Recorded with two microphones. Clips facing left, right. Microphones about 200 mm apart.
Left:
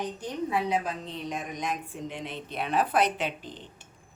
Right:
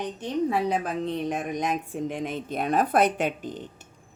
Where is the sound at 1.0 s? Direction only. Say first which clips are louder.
Right 7 dB; 55° right (ahead or behind).